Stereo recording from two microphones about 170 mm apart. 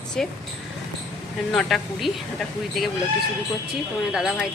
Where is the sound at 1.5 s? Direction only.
Centre (ahead or behind).